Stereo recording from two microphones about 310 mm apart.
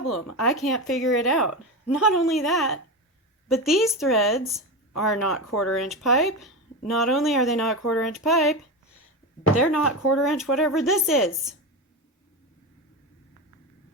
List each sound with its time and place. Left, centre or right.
0.4 s speech: centre
9.5 s speech: left
10.2 s speech: centre